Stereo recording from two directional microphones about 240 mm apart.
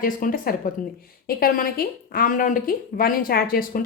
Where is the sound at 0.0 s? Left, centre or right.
Left.